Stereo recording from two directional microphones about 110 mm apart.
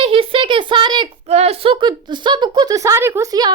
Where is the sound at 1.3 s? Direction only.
75° right (ahead or behind).